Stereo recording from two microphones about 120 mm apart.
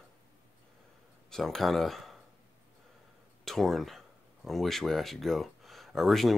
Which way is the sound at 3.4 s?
Centre (ahead or behind).